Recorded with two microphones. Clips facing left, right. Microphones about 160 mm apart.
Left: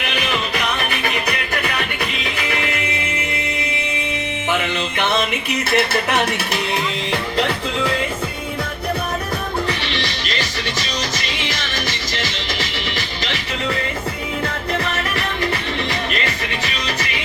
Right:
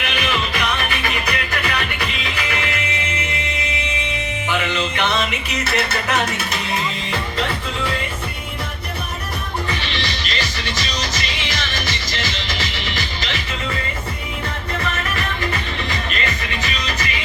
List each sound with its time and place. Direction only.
5.7 s music: 60° left (ahead or behind)